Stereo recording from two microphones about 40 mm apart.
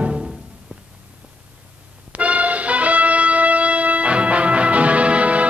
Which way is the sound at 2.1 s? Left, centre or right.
Right.